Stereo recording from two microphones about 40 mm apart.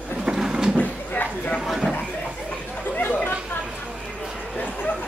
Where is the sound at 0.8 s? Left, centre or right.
Left.